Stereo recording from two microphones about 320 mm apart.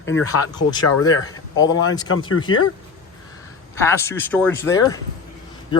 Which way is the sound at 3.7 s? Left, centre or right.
Centre.